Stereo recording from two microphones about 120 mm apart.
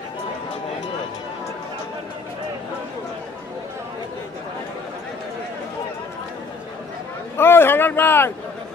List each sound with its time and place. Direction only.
7.3 s a man's voice: 20° left (ahead or behind)